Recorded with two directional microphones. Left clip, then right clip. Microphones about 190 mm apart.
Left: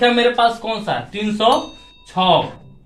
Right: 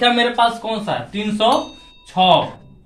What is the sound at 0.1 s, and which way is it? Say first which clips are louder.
Speech: left 1 dB; 25° left (ahead or behind).